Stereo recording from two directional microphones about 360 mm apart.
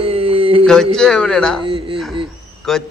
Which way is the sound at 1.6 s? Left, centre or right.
Centre.